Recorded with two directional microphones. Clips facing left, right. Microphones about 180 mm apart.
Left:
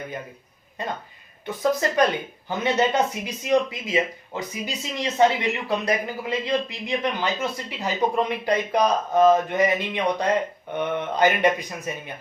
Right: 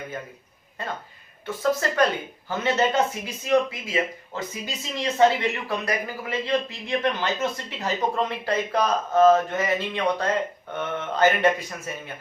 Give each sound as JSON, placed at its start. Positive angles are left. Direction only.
{"t": 0.8, "sound": "a man's voice", "side_deg": 15}